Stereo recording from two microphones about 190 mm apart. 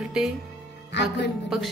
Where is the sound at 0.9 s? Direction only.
65° left (ahead or behind).